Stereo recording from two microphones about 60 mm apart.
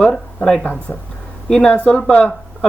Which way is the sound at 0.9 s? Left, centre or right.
Left.